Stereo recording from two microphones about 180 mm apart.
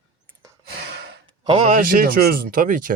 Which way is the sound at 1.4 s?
35° right (ahead or behind).